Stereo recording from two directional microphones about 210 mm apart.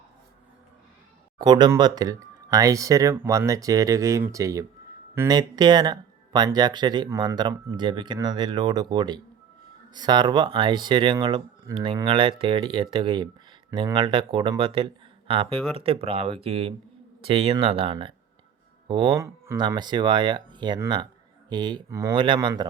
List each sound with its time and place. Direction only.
1.4 s speech: 20° right (ahead or behind)